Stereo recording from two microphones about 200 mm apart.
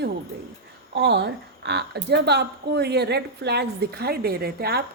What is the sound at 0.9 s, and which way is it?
A woman's voice, 55° right (ahead or behind).